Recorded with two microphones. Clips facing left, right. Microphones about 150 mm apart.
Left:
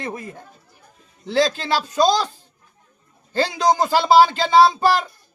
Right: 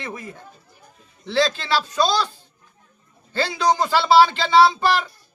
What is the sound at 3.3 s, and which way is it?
Speech, 40° left (ahead or behind).